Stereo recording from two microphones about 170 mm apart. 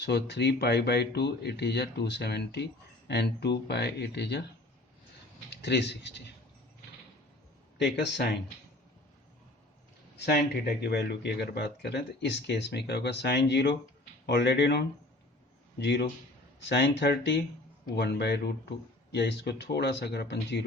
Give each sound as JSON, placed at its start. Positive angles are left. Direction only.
{"t": 0.0, "sound": "speech", "side_deg": 85}
{"t": 5.5, "sound": "speech", "side_deg": 85}
{"t": 7.8, "sound": "speech", "side_deg": 85}
{"t": 10.2, "sound": "speech", "side_deg": 70}
{"t": 17.9, "sound": "speech", "side_deg": 75}